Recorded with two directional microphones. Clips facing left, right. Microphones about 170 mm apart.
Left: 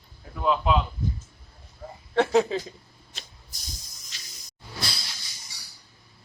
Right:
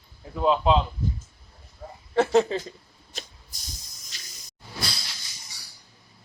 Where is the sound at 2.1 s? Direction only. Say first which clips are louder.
Right 1 dB; centre (ahead or behind).